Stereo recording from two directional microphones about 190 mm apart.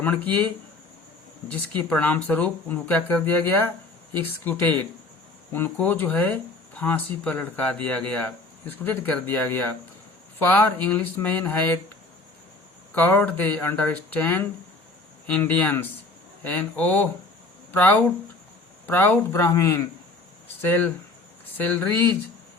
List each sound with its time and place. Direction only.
0.0 s speech: 10° left (ahead or behind)
1.5 s speech: 5° left (ahead or behind)
12.9 s speech: 10° left (ahead or behind)